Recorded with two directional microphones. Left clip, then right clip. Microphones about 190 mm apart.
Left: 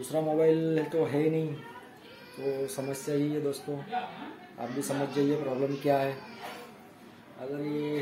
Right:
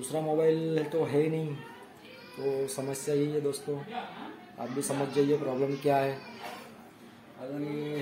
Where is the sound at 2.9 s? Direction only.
5° right (ahead or behind).